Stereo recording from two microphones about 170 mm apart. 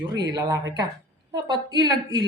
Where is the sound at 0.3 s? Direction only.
25° right (ahead or behind).